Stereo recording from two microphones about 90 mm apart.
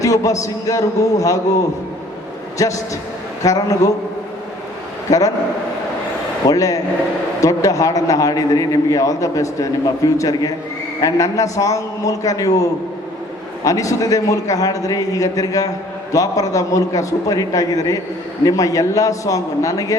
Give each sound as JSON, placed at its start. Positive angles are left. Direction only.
{"t": 0.0, "sound": "a man's voice", "side_deg": 40}
{"t": 2.6, "sound": "a man's voice", "side_deg": 40}
{"t": 5.1, "sound": "a man's voice", "side_deg": 40}
{"t": 6.5, "sound": "a man's voice", "side_deg": 40}
{"t": 13.7, "sound": "a man's voice", "side_deg": 40}